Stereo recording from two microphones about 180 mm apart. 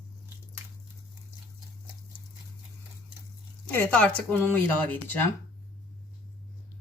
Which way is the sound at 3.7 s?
10° left (ahead or behind).